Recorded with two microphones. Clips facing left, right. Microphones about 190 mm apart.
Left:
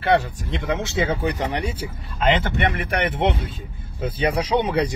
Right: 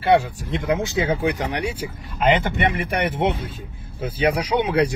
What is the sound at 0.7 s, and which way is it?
Speech, 10° right (ahead or behind).